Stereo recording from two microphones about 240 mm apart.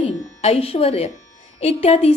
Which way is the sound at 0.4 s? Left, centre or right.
Left.